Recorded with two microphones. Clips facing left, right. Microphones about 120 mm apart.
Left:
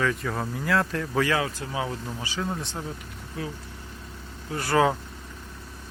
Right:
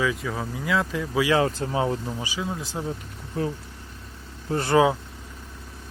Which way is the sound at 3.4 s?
40° right (ahead or behind).